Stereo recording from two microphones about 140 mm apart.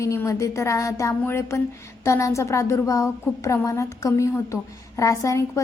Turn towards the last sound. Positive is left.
turn(degrees=20)  # may be behind; listen again after turning